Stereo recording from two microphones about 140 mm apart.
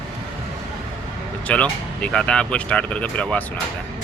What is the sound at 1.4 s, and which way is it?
Speech, 10° left (ahead or behind).